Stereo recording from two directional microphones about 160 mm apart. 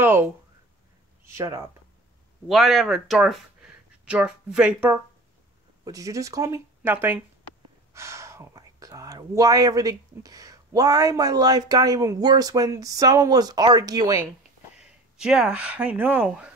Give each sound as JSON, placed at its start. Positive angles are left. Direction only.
{"t": 0.0, "sound": "speech", "side_deg": -15}
{"t": 2.4, "sound": "speech", "side_deg": 0}
{"t": 5.9, "sound": "speech", "side_deg": -20}
{"t": 15.1, "sound": "speech", "side_deg": -5}